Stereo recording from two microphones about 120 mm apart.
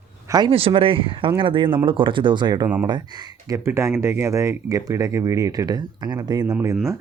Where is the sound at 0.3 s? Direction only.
35° right (ahead or behind).